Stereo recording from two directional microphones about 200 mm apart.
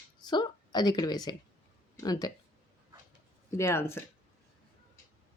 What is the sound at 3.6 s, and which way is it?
Speech, 15° left (ahead or behind).